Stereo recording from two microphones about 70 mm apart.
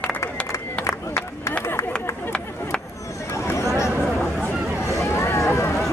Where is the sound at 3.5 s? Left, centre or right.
Left.